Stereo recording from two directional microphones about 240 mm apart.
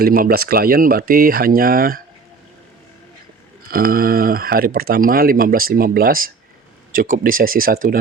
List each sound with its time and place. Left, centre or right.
0.0 s speech: right
3.7 s speech: right